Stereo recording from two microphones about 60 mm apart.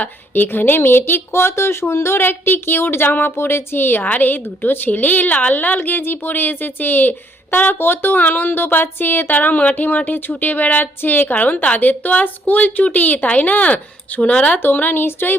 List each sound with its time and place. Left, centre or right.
0.0 s speech: left
14.6 s speech: left